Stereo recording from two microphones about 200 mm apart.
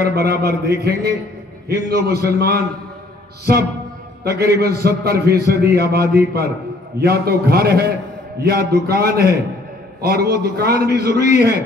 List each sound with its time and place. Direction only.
0.1 s a man's voice: 50° right (ahead or behind)
4.2 s a man's voice: 50° right (ahead or behind)